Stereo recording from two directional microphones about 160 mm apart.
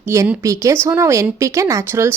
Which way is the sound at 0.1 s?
15° right (ahead or behind).